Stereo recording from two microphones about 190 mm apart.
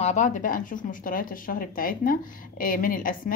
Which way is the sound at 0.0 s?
40° left (ahead or behind).